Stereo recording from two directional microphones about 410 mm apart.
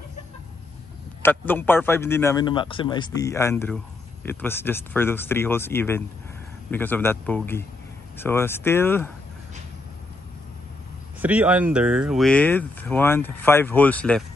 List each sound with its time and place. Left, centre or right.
1.2 s a man's voice: centre
11.1 s speech: centre